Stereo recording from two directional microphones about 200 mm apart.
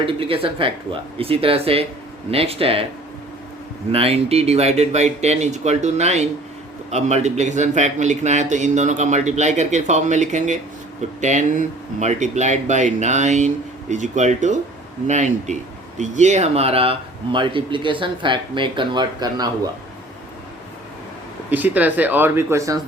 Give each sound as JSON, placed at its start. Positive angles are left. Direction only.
{"t": 0.0, "sound": "speech", "side_deg": -25}
{"t": 3.9, "sound": "a man's voice", "side_deg": -30}
{"t": 21.5, "sound": "speech", "side_deg": -10}